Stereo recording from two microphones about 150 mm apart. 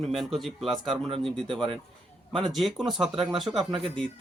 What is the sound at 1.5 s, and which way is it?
Speech, 35° right (ahead or behind).